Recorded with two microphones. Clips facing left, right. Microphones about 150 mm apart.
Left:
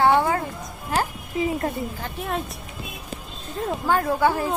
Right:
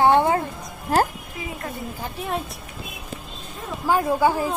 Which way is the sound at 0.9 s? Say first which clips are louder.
Right 5 dB; 35° right (ahead or behind).